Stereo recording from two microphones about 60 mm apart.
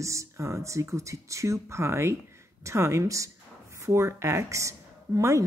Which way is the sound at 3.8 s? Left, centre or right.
Right.